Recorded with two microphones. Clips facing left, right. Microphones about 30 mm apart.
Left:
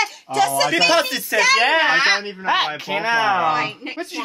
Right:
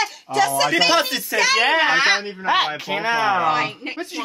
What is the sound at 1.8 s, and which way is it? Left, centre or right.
Speech, left.